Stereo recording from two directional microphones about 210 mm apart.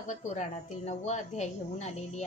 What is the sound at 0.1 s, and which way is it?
A woman's voice, 35° left (ahead or behind).